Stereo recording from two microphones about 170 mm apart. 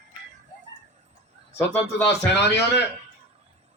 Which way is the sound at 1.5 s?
15° left (ahead or behind).